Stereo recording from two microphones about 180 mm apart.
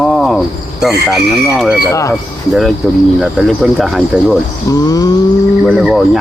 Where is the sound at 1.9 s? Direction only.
15° left (ahead or behind).